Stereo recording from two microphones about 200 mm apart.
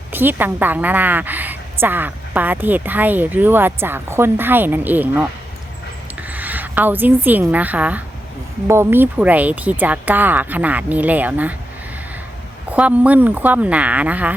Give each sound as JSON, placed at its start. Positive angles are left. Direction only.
{"t": 0.1, "sound": "a woman's voice", "side_deg": -10}
{"t": 6.2, "sound": "a woman's voice", "side_deg": -10}
{"t": 12.7, "sound": "a woman's voice", "side_deg": -5}